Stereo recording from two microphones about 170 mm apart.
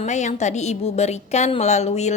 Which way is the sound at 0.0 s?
45° left (ahead or behind).